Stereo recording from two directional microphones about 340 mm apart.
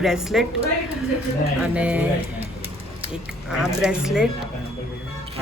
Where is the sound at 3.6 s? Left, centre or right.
Centre.